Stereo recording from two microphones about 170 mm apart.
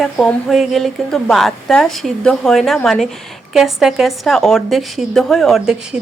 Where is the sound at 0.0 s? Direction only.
Centre (ahead or behind).